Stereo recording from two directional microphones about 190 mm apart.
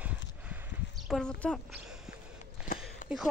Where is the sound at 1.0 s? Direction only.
Centre (ahead or behind).